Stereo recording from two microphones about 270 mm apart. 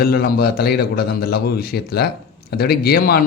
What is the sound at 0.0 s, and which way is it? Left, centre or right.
Speech, left.